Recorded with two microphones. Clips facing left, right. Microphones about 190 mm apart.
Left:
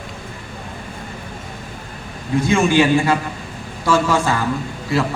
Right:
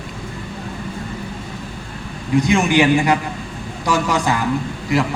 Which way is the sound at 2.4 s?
15° right (ahead or behind).